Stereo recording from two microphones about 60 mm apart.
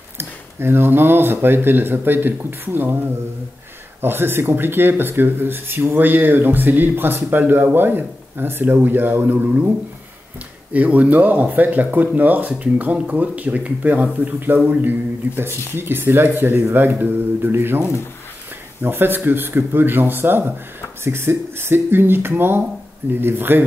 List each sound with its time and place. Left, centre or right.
0.2 s speech: right
4.0 s speech: right
10.7 s speech: right